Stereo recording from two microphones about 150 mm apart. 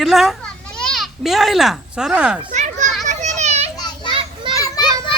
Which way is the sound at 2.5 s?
55° right (ahead or behind).